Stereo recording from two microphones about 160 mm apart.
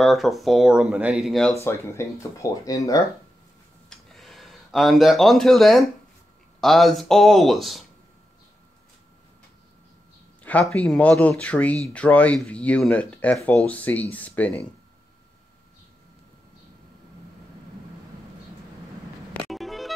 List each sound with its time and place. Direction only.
0.0 s speech: centre (ahead or behind)
1.6 s speech: 15° left (ahead or behind)
3.9 s a sound: centre (ahead or behind)
6.6 s speech: centre (ahead or behind)
10.4 s speech: 5° left (ahead or behind)
19.5 s music: centre (ahead or behind)